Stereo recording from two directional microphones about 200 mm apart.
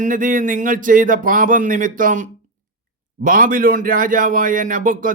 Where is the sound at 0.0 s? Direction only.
40° right (ahead or behind).